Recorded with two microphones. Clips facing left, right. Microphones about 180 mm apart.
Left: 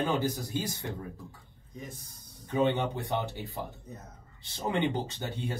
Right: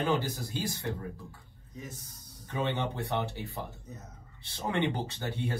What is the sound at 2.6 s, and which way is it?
Speech, 20° left (ahead or behind).